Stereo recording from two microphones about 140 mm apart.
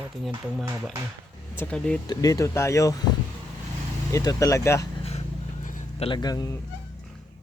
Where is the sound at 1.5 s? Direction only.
5° left (ahead or behind).